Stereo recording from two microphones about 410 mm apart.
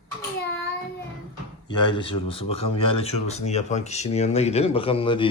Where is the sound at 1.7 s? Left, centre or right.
Centre.